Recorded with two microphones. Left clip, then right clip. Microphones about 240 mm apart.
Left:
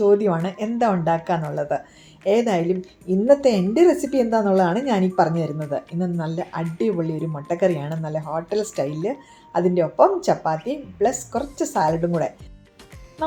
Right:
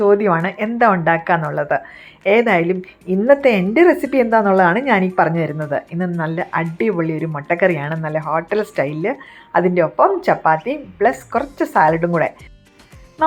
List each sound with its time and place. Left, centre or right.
0.1 s speech: centre